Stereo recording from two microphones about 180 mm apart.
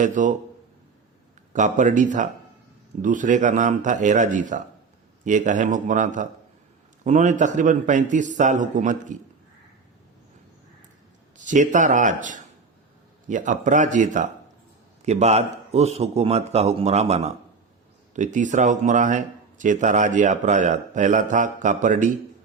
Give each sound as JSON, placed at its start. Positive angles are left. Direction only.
{"t": 0.0, "sound": "speech", "side_deg": -45}
{"t": 1.5, "sound": "speech", "side_deg": -45}
{"t": 11.3, "sound": "a man's voice", "side_deg": -45}